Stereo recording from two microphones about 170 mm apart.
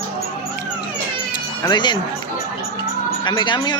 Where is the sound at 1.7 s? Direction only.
25° left (ahead or behind).